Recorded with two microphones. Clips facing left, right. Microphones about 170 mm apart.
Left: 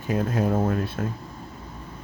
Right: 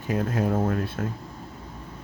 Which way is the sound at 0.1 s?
25° left (ahead or behind).